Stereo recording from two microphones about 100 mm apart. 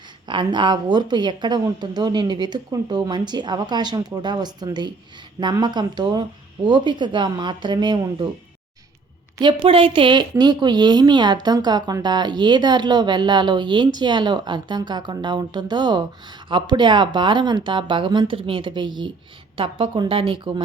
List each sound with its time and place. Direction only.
0.3 s speech: 50° right (ahead or behind)
9.4 s speech: 55° right (ahead or behind)
19.5 s speech: 65° right (ahead or behind)